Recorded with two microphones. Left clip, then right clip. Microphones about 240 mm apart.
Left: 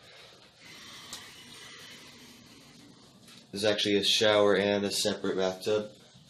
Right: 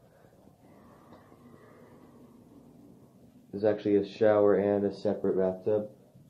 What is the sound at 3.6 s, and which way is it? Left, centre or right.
Speech, left.